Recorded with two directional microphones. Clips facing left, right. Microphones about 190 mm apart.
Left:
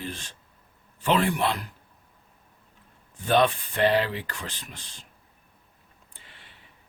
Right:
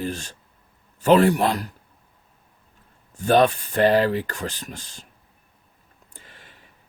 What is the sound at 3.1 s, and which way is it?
Speech, 45° right (ahead or behind).